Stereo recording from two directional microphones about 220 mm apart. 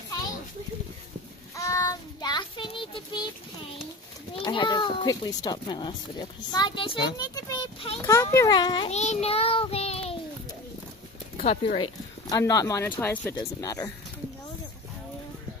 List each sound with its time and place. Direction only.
1.6 s child singing: 15° left (ahead or behind)
4.5 s a child's voice: 20° left (ahead or behind)
7.2 s a sound: 20° left (ahead or behind)
8.0 s a child's voice: 15° left (ahead or behind)
11.3 s speech: 30° left (ahead or behind); by 13.9 s 15° left (ahead or behind)